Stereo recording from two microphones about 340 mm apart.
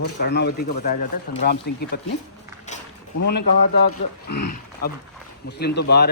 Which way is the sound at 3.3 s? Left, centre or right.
Left.